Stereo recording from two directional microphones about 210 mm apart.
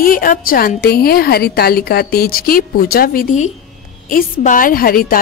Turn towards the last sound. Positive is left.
turn(degrees=45)  # may be behind; listen again after turning